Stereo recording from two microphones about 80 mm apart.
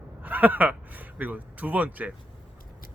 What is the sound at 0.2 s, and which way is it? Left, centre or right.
Speech, right.